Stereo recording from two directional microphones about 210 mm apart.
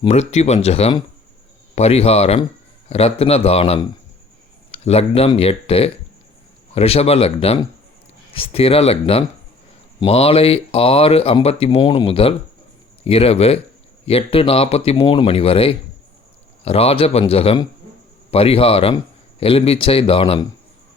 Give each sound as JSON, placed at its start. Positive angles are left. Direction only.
{"t": 0.0, "sound": "speech", "side_deg": 30}